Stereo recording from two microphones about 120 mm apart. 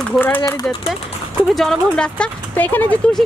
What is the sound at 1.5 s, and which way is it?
Speech, 5° left (ahead or behind).